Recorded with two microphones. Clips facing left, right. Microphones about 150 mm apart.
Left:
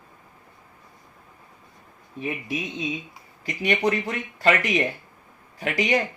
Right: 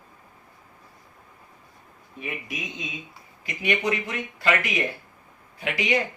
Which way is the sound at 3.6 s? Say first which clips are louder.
Left 3 dB; 40° left (ahead or behind).